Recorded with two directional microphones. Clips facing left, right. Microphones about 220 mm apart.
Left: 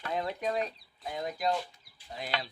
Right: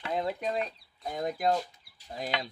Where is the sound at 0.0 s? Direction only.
30° right (ahead or behind).